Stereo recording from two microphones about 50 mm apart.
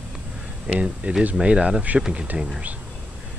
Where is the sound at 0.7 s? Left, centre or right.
Right.